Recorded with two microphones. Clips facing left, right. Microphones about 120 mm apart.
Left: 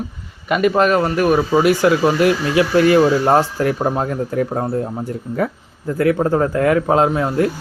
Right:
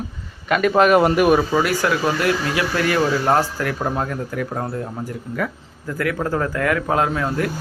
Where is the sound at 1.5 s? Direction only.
20° left (ahead or behind).